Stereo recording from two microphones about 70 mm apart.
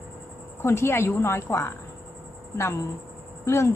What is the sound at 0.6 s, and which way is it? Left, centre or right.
A woman's voice, left.